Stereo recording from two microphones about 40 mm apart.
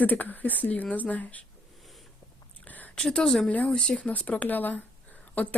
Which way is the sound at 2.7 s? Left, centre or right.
Left.